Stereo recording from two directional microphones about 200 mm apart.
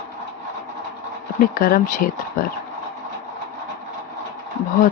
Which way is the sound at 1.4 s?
45° left (ahead or behind).